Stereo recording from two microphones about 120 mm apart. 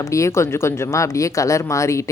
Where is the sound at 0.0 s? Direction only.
25° left (ahead or behind).